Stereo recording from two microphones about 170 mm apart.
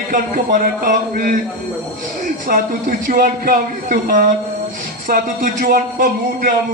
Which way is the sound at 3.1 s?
55° right (ahead or behind).